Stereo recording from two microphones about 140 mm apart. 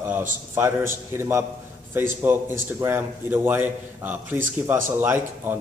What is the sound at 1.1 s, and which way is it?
A man's voice, 15° right (ahead or behind).